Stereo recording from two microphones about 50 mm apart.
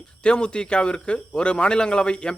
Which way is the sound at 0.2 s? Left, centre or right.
Centre.